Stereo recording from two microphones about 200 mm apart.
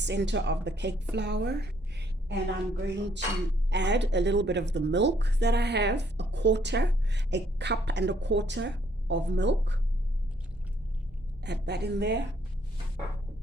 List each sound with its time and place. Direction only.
0.0 s speech: 60° right (ahead or behind)
1.1 s a sound: 55° right (ahead or behind)
2.8 s speech: 60° right (ahead or behind)
11.4 s speech: 55° right (ahead or behind)